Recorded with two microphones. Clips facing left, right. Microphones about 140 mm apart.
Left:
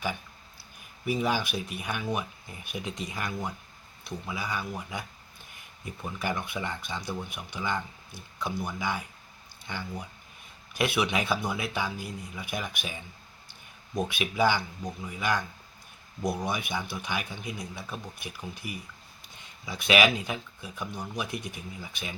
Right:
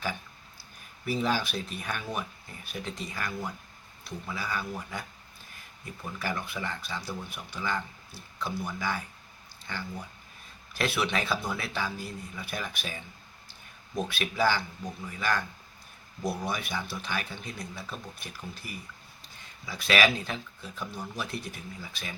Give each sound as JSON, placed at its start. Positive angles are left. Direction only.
{"t": 1.0, "sound": "a man's voice", "side_deg": 10}
{"t": 6.1, "sound": "a man's voice", "side_deg": 20}